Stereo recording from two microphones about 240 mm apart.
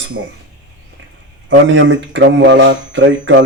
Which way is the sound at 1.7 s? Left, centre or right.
Right.